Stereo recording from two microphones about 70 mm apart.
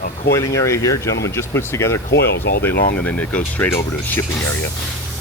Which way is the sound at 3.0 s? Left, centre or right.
Left.